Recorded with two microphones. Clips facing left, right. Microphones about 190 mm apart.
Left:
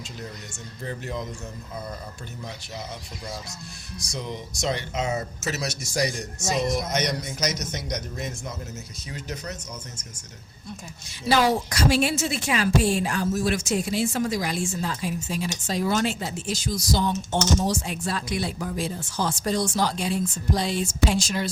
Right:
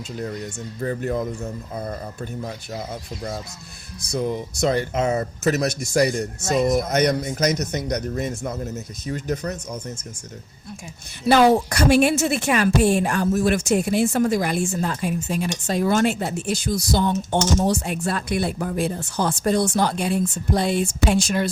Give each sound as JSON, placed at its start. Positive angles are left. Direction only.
{"t": 0.8, "sound": "speech", "side_deg": -50}
{"t": 4.1, "sound": "speech", "side_deg": -55}
{"t": 11.3, "sound": "speech", "side_deg": -55}